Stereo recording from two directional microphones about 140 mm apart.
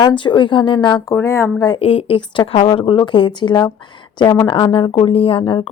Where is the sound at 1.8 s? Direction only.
40° left (ahead or behind).